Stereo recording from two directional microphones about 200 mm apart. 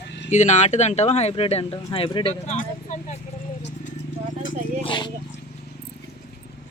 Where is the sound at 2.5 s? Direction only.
35° left (ahead or behind).